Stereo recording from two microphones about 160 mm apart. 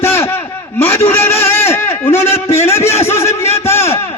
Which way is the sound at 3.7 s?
15° left (ahead or behind).